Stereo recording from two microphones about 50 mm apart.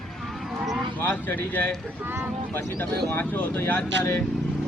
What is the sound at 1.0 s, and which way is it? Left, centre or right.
Speech, left.